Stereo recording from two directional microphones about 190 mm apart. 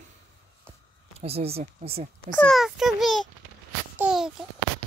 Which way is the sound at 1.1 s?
30° right (ahead or behind).